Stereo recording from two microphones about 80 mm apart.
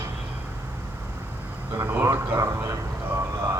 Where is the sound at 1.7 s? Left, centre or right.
Right.